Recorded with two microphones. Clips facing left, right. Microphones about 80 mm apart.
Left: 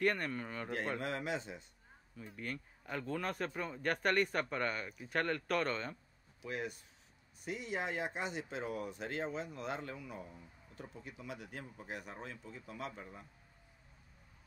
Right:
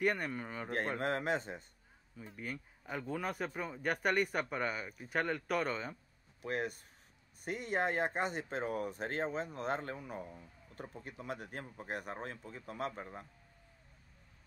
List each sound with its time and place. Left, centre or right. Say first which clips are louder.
0.0 s speech: even; centre
0.9 s speech: right 4 dB; right
2.1 s speech: even; centre
6.4 s speech: right 4 dB; right